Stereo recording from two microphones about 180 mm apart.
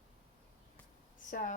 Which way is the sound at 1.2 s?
45° left (ahead or behind).